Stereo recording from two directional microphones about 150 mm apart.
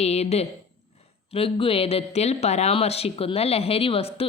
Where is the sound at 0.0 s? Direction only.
45° left (ahead or behind).